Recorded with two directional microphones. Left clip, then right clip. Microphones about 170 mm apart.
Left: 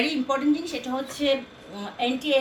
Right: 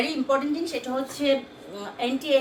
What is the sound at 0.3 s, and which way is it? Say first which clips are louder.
A woman's voice: even; 25° right (ahead or behind).